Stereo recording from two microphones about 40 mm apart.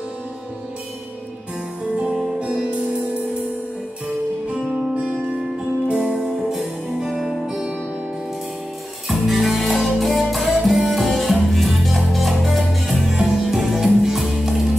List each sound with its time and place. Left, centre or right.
4.6 s music: centre
5.9 s music: right
9.0 s music: centre
13.1 s music: centre